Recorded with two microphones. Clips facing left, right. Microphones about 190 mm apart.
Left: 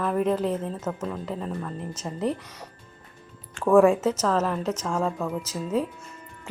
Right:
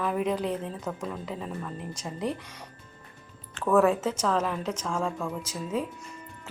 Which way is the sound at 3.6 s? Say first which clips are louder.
Left 5 dB; 10° left (ahead or behind).